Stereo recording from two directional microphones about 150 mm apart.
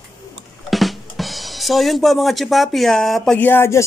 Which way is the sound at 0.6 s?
Centre (ahead or behind).